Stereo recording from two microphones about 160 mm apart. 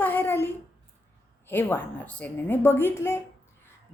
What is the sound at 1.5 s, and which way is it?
A woman's voice, 10° left (ahead or behind).